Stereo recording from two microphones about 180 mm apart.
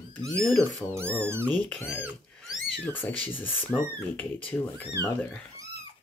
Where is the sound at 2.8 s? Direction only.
10° left (ahead or behind).